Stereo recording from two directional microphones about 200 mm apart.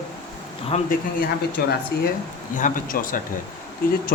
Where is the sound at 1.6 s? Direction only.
50° left (ahead or behind).